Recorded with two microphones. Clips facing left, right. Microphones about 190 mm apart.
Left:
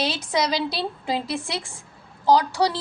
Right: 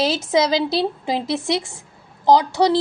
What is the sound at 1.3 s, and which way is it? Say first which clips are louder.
A woman's voice: right 7 dB; 25° right (ahead or behind).